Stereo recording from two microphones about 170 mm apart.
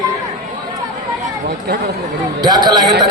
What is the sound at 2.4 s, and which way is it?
Speech, 25° right (ahead or behind).